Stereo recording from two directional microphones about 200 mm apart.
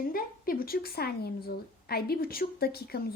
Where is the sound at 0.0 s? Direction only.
45° left (ahead or behind).